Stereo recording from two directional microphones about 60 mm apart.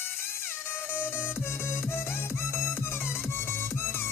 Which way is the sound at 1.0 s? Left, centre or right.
Left.